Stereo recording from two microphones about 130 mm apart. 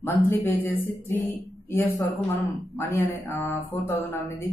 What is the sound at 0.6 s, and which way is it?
A man's voice, 20° left (ahead or behind).